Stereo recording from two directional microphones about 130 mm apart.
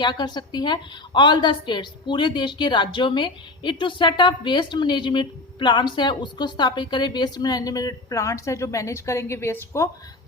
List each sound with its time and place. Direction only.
0.0 s a woman's voice: 35° left (ahead or behind)